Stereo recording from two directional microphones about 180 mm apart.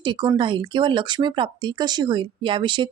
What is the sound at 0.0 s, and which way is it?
Speech, 25° right (ahead or behind).